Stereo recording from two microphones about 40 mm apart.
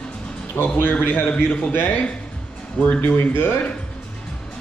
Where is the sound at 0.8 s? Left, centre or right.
Left.